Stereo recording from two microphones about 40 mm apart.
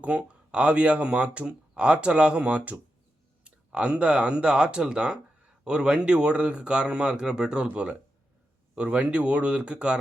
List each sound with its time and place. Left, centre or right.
0.0 s speech: right